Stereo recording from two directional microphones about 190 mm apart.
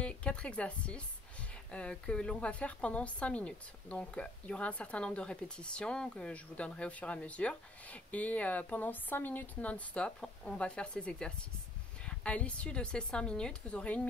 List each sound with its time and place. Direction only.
0.0 s a woman's voice: 5° left (ahead or behind)